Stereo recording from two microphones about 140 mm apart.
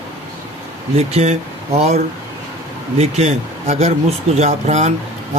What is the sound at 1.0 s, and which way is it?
Speech, 50° right (ahead or behind).